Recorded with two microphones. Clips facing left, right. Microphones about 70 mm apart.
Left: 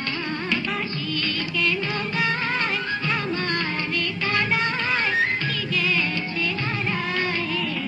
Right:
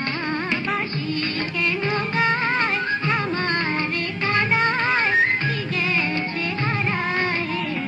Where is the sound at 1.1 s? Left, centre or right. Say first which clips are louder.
Even; right.